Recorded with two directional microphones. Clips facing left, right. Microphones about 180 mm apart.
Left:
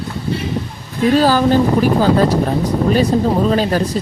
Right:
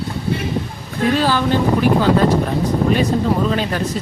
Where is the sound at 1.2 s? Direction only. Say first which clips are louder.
Left 7 dB; 40° left (ahead or behind).